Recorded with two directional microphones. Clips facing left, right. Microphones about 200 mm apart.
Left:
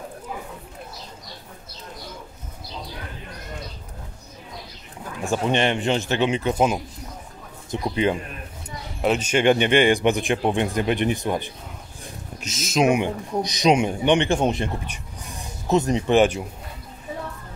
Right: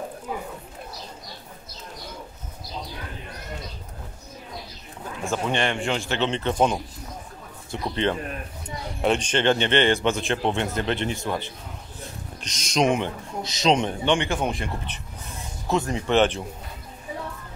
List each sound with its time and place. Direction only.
5.3 s speech: 20° left (ahead or behind)
12.4 s speech: 5° left (ahead or behind); by 14.7 s 25° left (ahead or behind)
15.7 s speech: 20° left (ahead or behind)
16.2 s speech: 10° left (ahead or behind)